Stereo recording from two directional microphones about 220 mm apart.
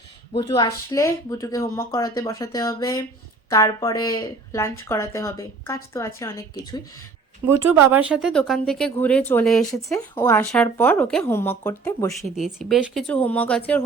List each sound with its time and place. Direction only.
0.3 s speech: 20° left (ahead or behind)
7.7 s speech: 10° right (ahead or behind); by 12.1 s 10° left (ahead or behind)
12.4 s speech: centre (ahead or behind)